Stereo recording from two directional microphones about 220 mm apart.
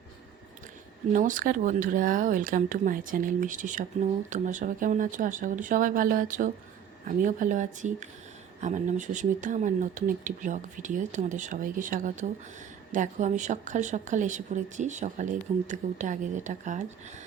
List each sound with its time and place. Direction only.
1.1 s speech: 35° right (ahead or behind)